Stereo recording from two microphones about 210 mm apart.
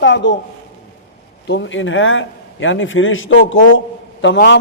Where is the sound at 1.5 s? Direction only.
60° left (ahead or behind).